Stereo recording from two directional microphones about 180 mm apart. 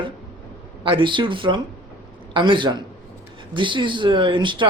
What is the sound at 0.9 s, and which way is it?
Speech, 25° right (ahead or behind).